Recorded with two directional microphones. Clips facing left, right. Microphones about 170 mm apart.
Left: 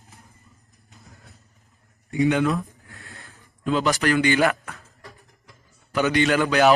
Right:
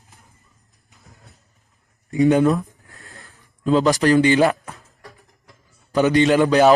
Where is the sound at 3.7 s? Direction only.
30° right (ahead or behind).